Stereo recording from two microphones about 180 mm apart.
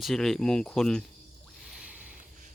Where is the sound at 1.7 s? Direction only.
5° right (ahead or behind).